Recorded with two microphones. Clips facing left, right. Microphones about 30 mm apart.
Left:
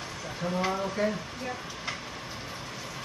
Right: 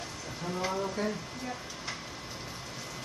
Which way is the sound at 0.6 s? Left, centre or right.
Left.